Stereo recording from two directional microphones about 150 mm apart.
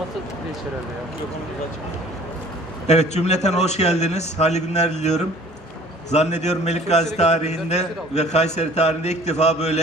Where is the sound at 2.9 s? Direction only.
45° left (ahead or behind).